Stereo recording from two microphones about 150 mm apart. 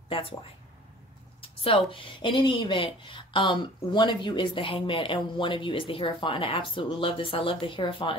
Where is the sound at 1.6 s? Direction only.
35° left (ahead or behind).